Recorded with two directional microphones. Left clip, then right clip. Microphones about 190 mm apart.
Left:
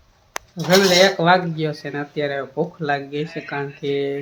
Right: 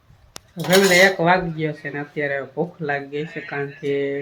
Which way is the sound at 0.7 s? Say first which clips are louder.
Even; 15° left (ahead or behind).